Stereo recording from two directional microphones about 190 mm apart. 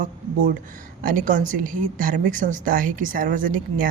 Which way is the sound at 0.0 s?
45° right (ahead or behind).